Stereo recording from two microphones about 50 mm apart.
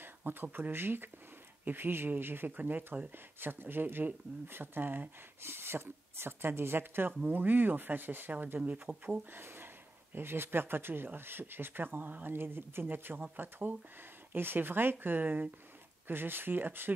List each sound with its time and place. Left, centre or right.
0.0 s speech: right